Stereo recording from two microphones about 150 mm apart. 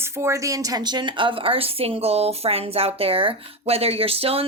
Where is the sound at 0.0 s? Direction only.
15° right (ahead or behind).